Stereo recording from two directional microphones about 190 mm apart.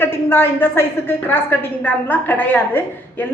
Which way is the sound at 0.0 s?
10° left (ahead or behind).